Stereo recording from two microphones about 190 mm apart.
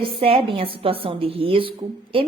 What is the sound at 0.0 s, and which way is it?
A woman's voice, 30° right (ahead or behind).